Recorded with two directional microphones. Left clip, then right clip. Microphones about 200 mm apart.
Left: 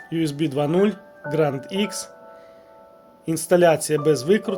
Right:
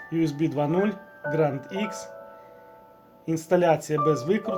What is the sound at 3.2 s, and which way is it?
Speech, 45° left (ahead or behind).